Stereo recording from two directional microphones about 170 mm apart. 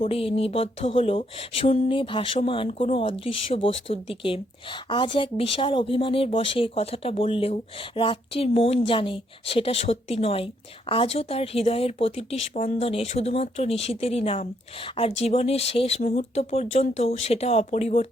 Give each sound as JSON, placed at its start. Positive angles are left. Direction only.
{"t": 0.1, "sound": "speech", "side_deg": 35}